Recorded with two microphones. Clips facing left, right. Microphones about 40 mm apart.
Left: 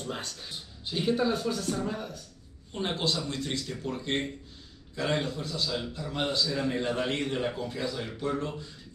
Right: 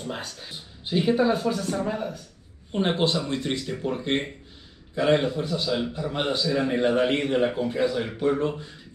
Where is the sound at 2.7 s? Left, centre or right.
Right.